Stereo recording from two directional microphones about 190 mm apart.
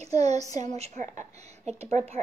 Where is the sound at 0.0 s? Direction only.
35° right (ahead or behind).